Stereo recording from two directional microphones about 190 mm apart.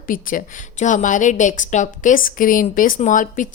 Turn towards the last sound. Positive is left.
turn(degrees=45)  # may be behind; listen again after turning